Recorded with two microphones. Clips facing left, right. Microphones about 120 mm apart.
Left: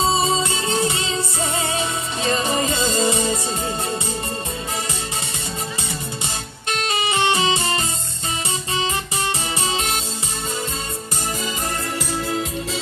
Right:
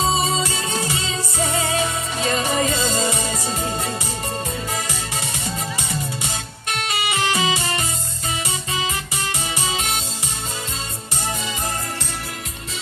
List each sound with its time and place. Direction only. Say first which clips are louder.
0.4 s music: left 3 dB; 30° left (ahead or behind)
2.2 s music: even; 30° left (ahead or behind)
6.7 s music: left 2 dB; 30° left (ahead or behind)
9.6 s music: left 2 dB; 35° left (ahead or behind)